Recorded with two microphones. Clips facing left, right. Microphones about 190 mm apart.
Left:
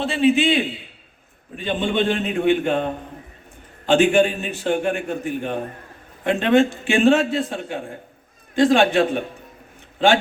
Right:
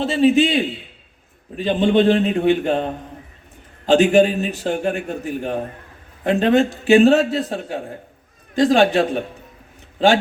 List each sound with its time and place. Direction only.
0.0 s a man's voice: 40° right (ahead or behind)
3.8 s a man's voice: 40° right (ahead or behind)